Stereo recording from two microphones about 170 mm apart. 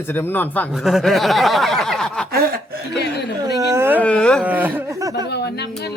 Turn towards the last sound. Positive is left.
turn(degrees=75)  # may be behind; listen again after turning